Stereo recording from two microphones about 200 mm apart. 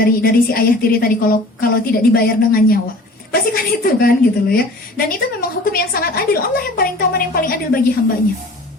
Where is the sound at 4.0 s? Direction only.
50° left (ahead or behind).